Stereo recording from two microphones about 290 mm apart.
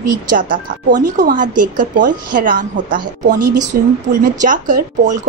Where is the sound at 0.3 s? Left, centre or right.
Right.